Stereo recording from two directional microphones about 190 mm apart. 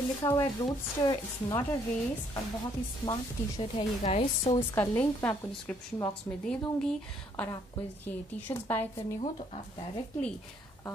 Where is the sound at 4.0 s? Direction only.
30° left (ahead or behind).